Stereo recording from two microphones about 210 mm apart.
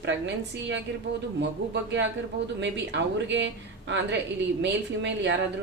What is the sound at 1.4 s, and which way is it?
A woman's voice, 55° right (ahead or behind).